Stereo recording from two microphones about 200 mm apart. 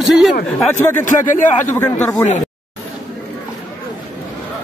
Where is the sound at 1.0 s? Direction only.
40° left (ahead or behind).